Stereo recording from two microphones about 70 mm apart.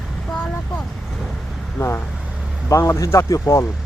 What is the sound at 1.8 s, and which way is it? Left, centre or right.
Vehicle, left.